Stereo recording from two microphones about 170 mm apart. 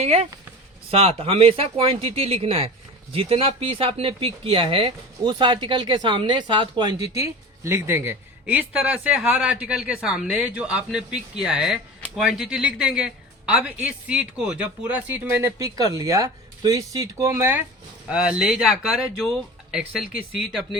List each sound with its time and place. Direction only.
0.0 s speech: 40° right (ahead or behind); by 20.1 s 5° right (ahead or behind)